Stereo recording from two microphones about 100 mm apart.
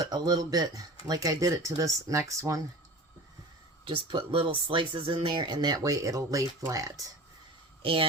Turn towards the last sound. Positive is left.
turn(degrees=-60)  # may be behind; listen again after turning